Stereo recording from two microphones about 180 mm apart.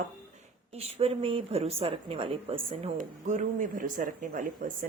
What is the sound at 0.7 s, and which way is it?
A woman's voice, 35° right (ahead or behind).